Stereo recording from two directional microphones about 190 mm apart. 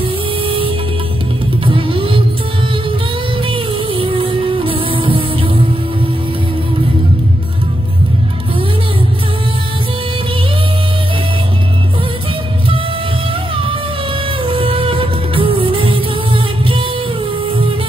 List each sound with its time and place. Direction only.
0.4 s music: 25° right (ahead or behind)
1.7 s music: 30° right (ahead or behind)
3.4 s music: 30° right (ahead or behind)
14.4 s music: 30° right (ahead or behind)